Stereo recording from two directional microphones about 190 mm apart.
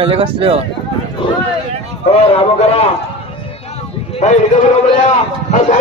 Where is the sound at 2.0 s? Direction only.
30° left (ahead or behind).